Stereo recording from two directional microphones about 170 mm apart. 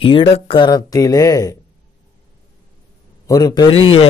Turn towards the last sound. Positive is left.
turn(degrees=25)  # may be behind; listen again after turning